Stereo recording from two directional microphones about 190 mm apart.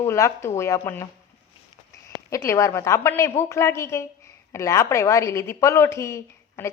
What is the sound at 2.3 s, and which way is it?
A woman's voice, 15° left (ahead or behind).